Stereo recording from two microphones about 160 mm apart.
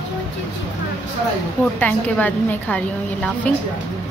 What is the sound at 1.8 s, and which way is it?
A woman's voice, 10° left (ahead or behind).